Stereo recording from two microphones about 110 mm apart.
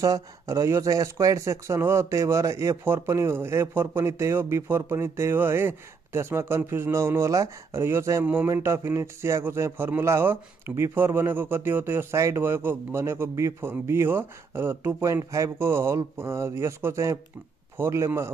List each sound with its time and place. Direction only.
0.0 s speech: 30° right (ahead or behind)